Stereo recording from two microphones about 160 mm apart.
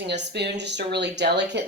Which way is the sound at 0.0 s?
90° right.